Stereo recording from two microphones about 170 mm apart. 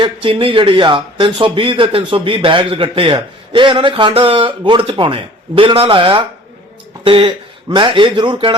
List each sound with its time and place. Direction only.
0.0 s speech: 30° right (ahead or behind)